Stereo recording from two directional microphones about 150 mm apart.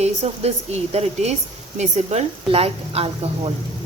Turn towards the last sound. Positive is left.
turn(degrees=-40)  # may be behind; listen again after turning